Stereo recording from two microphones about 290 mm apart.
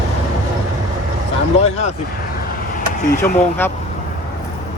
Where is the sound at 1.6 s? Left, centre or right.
Left.